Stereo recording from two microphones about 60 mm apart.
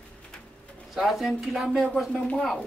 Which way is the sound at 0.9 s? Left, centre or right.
Centre.